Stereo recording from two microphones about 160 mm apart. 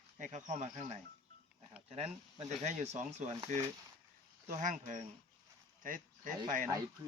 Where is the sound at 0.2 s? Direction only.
50° right (ahead or behind).